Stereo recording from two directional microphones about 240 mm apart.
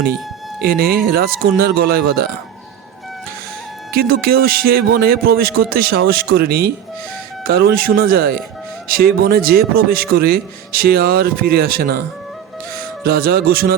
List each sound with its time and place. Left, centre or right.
0.6 s speech: right
3.9 s speech: right
13.1 s speech: right